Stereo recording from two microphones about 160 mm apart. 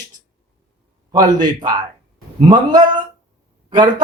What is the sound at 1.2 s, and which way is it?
A man's voice, 25° right (ahead or behind).